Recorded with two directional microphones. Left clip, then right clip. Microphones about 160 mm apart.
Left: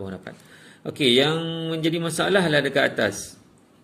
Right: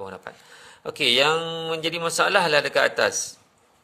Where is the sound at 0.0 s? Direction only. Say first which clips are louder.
Even; 40° right (ahead or behind).